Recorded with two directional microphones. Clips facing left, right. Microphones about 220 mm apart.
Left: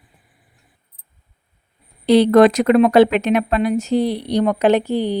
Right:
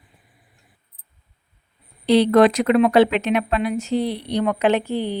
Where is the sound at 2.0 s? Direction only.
45° left (ahead or behind).